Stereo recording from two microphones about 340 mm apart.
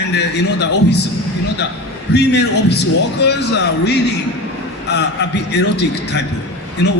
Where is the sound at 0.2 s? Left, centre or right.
Left.